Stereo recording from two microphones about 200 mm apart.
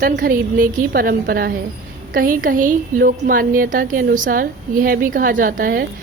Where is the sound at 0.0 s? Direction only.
40° right (ahead or behind).